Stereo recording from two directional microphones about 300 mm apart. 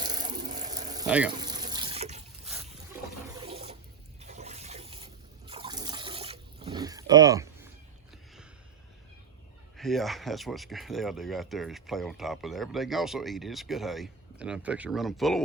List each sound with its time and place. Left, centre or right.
0.2 s ratchet: right
0.7 s a sound: centre
1.0 s speech: centre
1.4 s water: centre
3.3 s water: centre
9.7 s speech: centre